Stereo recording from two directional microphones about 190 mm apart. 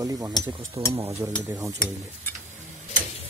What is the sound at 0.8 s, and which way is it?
Speech, 30° right (ahead or behind).